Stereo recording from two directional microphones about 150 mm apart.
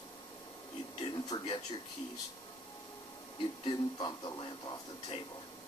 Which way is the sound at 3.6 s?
30° left (ahead or behind).